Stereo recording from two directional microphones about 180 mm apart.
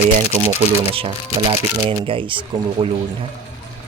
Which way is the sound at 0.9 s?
30° right (ahead or behind).